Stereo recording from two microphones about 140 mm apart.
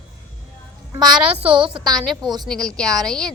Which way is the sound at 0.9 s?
30° right (ahead or behind).